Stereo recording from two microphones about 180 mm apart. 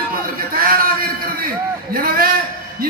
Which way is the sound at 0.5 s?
55° right (ahead or behind).